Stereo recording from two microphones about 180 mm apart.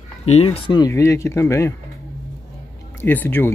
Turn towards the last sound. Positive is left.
turn(degrees=10)  # may be behind; listen again after turning